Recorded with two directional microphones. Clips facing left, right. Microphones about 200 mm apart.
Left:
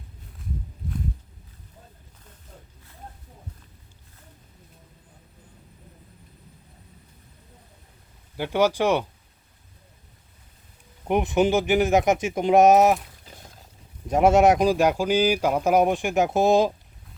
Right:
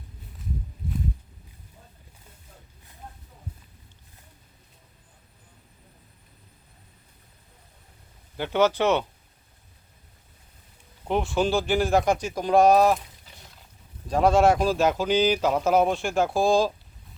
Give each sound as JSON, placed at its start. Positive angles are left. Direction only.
{"t": 8.4, "sound": "speech", "side_deg": 10}
{"t": 11.1, "sound": "speech", "side_deg": 20}
{"t": 14.1, "sound": "speech", "side_deg": 20}